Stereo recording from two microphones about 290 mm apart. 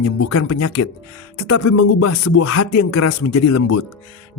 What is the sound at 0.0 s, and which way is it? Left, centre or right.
Speech, left.